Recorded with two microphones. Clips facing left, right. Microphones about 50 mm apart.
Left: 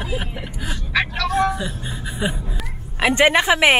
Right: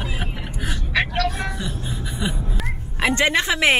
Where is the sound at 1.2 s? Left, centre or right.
Centre.